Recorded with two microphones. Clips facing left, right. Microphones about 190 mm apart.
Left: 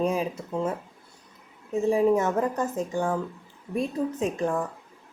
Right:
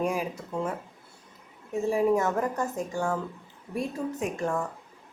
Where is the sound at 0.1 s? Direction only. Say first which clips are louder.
Left 3 dB; 20° left (ahead or behind).